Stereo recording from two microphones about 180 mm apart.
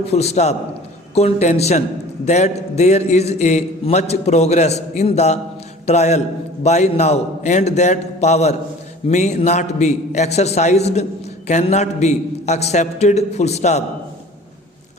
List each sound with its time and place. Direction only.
0.1 s a man's voice: 35° left (ahead or behind)